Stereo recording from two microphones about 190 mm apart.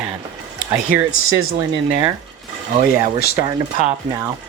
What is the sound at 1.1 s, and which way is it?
Speech, 90° left.